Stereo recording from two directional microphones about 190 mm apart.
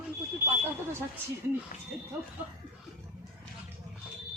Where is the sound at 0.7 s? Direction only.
15° right (ahead or behind).